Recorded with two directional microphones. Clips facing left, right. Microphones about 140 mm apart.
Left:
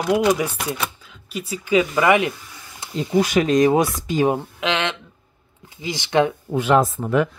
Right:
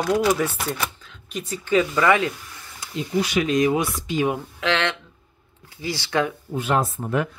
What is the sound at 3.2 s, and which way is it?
Speech, 45° left (ahead or behind).